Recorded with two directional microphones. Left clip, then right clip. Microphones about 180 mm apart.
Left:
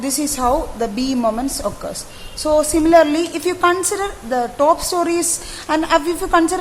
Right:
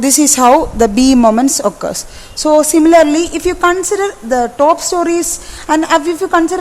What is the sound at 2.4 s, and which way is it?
A woman's voice, 35° right (ahead or behind).